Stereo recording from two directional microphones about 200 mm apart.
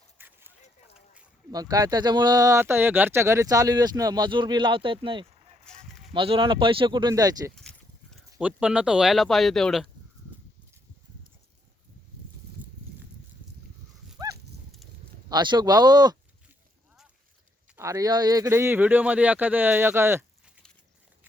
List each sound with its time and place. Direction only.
0.2 s clip-clop: 10° right (ahead or behind)
0.9 s a sound: 5° right (ahead or behind)
1.5 s speech: 20° right (ahead or behind)
5.6 s honk: centre (ahead or behind)
6.1 s speech: 25° right (ahead or behind)
7.5 s a sound: centre (ahead or behind)
8.4 s speech: 5° right (ahead or behind)
15.3 s speech: 20° right (ahead or behind)
17.7 s speech: 15° right (ahead or behind)